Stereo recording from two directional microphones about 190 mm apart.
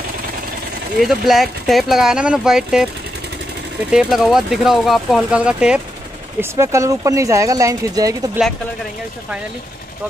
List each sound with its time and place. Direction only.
0.9 s speech: centre (ahead or behind)
3.9 s speech: centre (ahead or behind); by 8.2 s 20° right (ahead or behind)
8.4 s speech: 5° right (ahead or behind)